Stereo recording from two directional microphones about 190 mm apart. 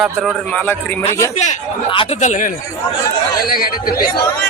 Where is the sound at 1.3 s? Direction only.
40° left (ahead or behind).